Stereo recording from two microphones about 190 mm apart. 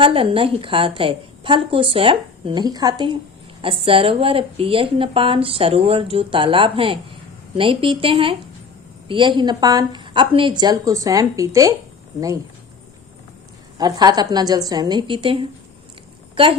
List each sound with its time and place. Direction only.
0.0 s a woman's voice: 30° right (ahead or behind)
13.7 s a woman's voice: 20° right (ahead or behind)